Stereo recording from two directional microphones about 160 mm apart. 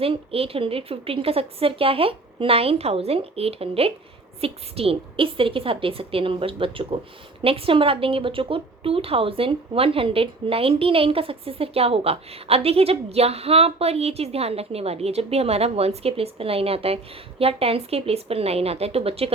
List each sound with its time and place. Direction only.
0.0 s a woman's voice: 35° right (ahead or behind)